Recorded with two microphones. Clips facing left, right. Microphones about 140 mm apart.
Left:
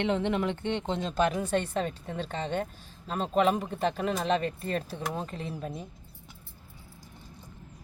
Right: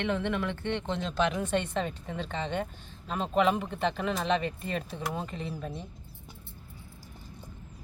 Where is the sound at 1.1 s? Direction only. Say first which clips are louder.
Left 2 dB; 45° left (ahead or behind).